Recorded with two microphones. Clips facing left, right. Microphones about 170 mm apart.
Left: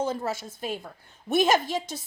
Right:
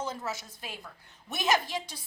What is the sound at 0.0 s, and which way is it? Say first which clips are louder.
Speech: left 8 dB; 30° left (ahead or behind).